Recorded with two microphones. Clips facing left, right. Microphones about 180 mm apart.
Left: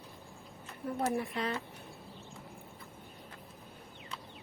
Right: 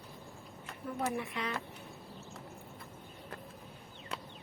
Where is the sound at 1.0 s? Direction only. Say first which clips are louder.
Left 3 dB; 35° left (ahead or behind).